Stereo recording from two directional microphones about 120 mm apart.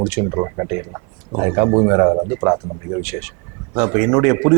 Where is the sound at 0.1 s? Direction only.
15° right (ahead or behind).